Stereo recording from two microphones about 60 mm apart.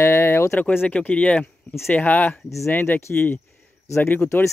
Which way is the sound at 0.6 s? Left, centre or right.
Left.